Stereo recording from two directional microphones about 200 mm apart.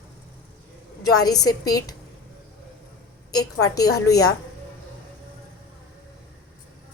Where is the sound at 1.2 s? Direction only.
20° left (ahead or behind).